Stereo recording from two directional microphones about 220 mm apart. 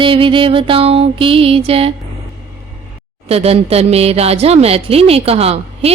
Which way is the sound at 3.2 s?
25° right (ahead or behind).